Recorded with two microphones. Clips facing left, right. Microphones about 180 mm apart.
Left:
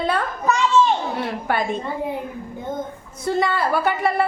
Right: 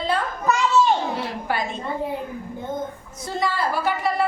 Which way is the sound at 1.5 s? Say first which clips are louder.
Left 3 dB; 55° left (ahead or behind).